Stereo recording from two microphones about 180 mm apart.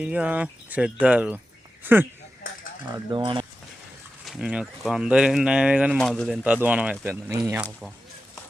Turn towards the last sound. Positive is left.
turn(degrees=-5)  # may be behind; listen again after turning